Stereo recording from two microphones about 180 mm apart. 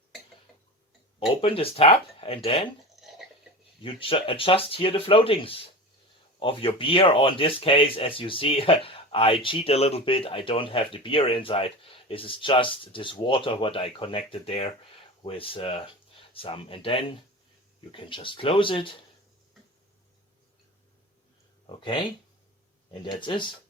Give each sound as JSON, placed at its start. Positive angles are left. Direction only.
{"t": 1.4, "sound": "speech", "side_deg": 30}
{"t": 2.9, "sound": "a sound", "side_deg": 0}
{"t": 3.8, "sound": "speech", "side_deg": 30}
{"t": 22.9, "sound": "speech", "side_deg": 25}